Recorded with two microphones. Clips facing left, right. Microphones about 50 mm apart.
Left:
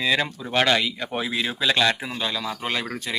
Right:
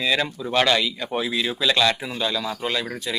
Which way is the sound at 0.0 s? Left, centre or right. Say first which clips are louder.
Even; left.